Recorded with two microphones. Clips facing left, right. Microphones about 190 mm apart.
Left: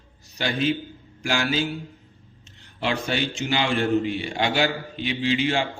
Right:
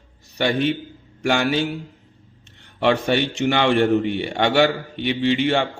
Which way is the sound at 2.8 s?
60° right (ahead or behind).